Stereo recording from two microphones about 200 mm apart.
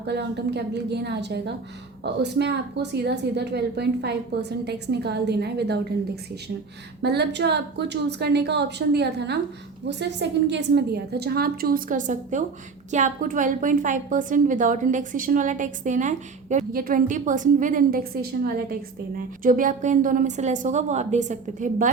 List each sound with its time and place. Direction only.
0.0 s a woman's voice: 55° right (ahead or behind)
7.0 s a woman's voice: 55° right (ahead or behind); by 21.8 s 40° right (ahead or behind)